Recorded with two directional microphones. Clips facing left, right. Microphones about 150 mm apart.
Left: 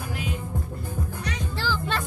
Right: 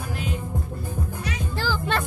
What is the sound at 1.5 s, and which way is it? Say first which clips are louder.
Music: right 3 dB; 45° right (ahead or behind).